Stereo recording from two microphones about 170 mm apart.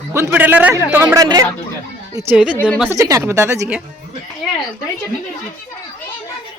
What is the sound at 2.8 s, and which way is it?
Speech, 20° right (ahead or behind).